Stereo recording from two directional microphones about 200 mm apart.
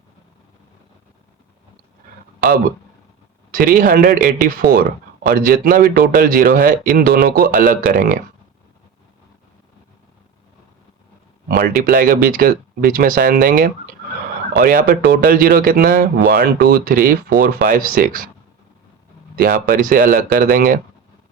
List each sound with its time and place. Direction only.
3.5 s speech: 45° right (ahead or behind)
11.4 s speech: 50° right (ahead or behind)
19.4 s speech: 45° right (ahead or behind)